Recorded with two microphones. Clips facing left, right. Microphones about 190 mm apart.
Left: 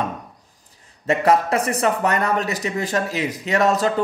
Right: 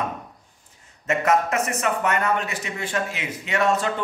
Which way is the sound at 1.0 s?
35° left (ahead or behind).